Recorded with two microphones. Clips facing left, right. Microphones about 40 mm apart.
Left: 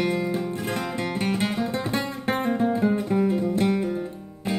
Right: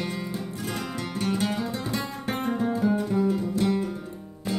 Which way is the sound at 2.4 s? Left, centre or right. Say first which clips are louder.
Left 2 dB; left.